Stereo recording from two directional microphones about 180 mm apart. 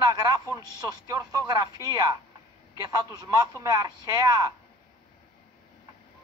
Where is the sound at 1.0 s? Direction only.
20° right (ahead or behind).